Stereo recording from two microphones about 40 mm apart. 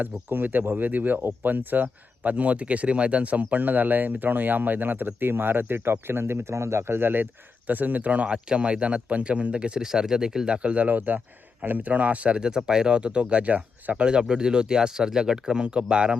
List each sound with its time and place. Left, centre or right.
0.0 s speech: right
6.8 s speech: right
7.7 s speech: right
9.8 s speech: centre
10.8 s speech: right
12.4 s speech: centre
13.9 s speech: right